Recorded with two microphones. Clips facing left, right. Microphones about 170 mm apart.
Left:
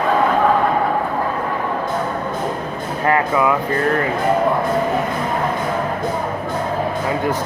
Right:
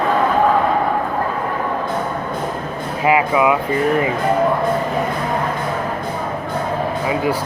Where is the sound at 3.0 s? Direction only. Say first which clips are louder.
Right 2 dB; 10° right (ahead or behind).